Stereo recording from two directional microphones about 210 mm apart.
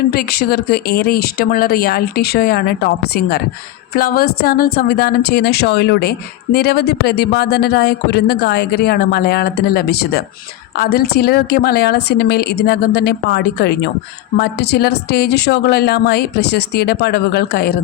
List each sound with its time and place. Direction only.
0.1 s a woman's voice: 45° left (ahead or behind)